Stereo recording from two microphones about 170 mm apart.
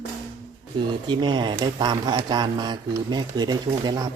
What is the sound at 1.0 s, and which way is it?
Speech, 25° right (ahead or behind).